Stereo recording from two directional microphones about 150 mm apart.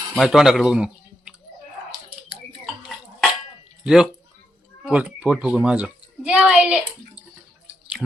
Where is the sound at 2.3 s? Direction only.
5° right (ahead or behind).